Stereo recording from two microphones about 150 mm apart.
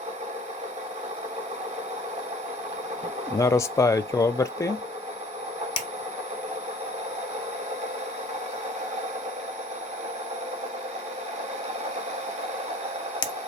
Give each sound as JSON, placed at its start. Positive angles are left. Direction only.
{"t": 3.3, "sound": "speech", "side_deg": 20}